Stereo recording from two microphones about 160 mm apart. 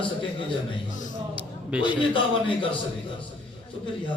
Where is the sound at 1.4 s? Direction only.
10° right (ahead or behind).